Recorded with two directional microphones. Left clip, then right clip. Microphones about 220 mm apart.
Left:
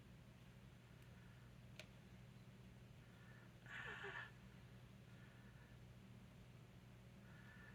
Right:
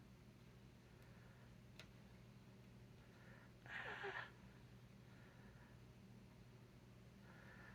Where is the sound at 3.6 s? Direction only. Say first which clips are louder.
Right 2 dB; 30° right (ahead or behind).